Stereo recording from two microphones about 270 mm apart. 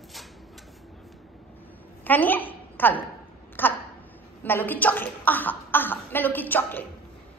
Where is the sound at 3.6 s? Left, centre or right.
Centre.